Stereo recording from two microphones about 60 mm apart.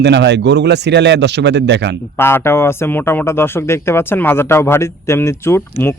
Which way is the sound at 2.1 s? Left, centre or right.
Left.